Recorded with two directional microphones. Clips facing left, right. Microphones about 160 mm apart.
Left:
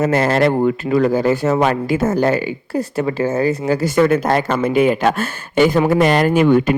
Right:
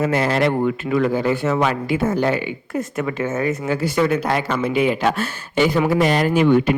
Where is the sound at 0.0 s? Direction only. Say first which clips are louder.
Left 3 dB; 45° left (ahead or behind).